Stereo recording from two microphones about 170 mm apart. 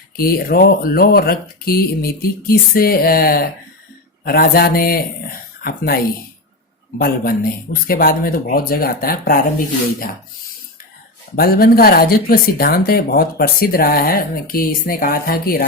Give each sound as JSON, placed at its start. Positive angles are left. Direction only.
{"t": 0.2, "sound": "speech", "side_deg": 60}
{"t": 7.0, "sound": "speech", "side_deg": 60}
{"t": 11.3, "sound": "speech", "side_deg": 60}